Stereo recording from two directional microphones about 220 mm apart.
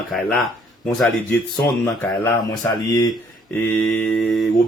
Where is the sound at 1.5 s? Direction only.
15° left (ahead or behind).